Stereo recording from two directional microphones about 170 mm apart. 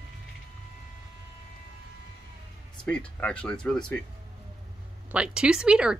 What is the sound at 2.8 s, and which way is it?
Speech, 5° left (ahead or behind).